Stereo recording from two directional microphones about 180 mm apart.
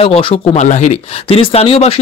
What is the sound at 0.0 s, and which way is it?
Speech, 30° left (ahead or behind).